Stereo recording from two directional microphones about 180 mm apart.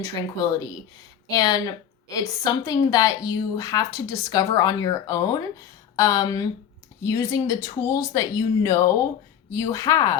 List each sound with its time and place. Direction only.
0.0 s a woman's voice: 20° left (ahead or behind)